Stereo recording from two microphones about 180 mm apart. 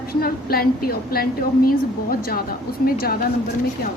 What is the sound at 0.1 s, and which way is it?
A woman's voice, 55° left (ahead or behind).